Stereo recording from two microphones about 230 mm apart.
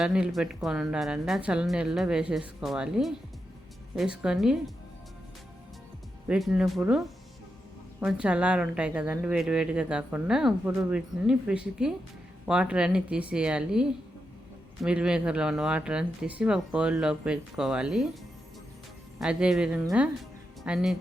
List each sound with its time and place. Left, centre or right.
0.0 s a woman's voice: centre
6.2 s a woman's voice: centre
8.0 s a woman's voice: centre
14.8 s a woman's voice: centre
19.2 s a woman's voice: centre